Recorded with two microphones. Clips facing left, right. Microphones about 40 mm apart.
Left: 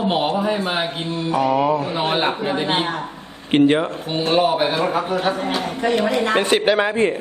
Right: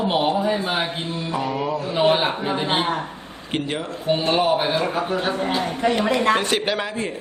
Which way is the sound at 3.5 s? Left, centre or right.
Left.